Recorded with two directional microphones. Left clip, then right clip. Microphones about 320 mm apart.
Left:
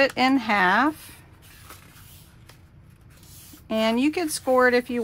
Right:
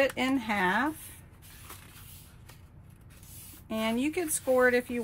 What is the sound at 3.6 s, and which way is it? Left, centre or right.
A woman's voice, left.